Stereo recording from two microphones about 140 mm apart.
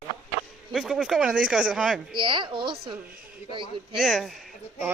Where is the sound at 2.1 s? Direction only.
35° right (ahead or behind).